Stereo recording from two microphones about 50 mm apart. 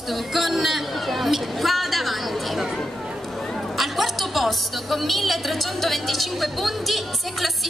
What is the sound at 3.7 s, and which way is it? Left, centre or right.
A woman's voice, centre.